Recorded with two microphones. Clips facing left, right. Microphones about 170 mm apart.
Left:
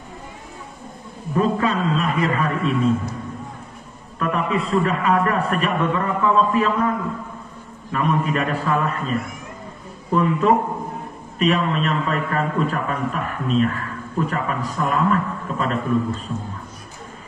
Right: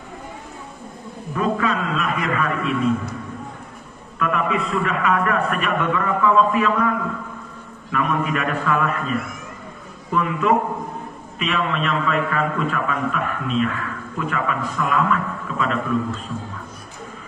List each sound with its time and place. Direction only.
1.3 s a man's voice: 30° left (ahead or behind)
4.2 s a man's voice: 35° left (ahead or behind)
10.1 s a man's voice: 35° left (ahead or behind)